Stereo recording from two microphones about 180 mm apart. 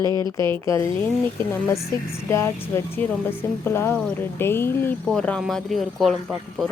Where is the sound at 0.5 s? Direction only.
15° left (ahead or behind).